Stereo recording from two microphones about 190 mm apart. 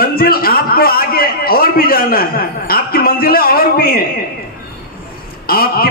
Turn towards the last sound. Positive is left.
turn(degrees=50)  # may be behind; listen again after turning